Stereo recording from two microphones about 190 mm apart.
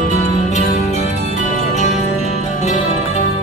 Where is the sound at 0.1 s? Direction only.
40° left (ahead or behind).